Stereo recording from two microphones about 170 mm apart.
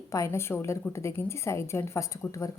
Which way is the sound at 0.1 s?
15° left (ahead or behind).